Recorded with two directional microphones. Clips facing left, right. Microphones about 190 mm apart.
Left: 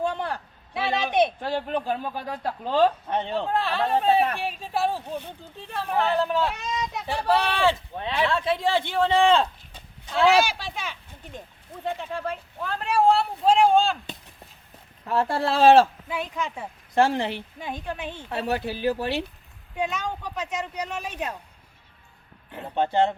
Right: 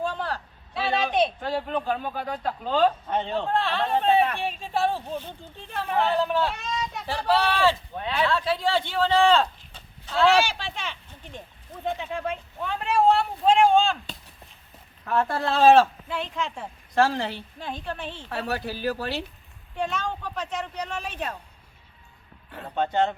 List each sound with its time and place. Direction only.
0.0 s a sound: 15° left (ahead or behind)
2.2 s speech: 35° left (ahead or behind)
3.2 s speech: 10° left (ahead or behind)
5.5 s speech: centre (ahead or behind); by 8.8 s 20° left (ahead or behind)
8.9 s a sound: 20° left (ahead or behind)
11.9 s a sound: centre (ahead or behind)
15.0 s speech: 30° left (ahead or behind)
16.0 s speech: 10° left (ahead or behind)
16.9 s speech: 20° left (ahead or behind)
19.7 s speech: 10° left (ahead or behind)
22.5 s speech: 25° left (ahead or behind)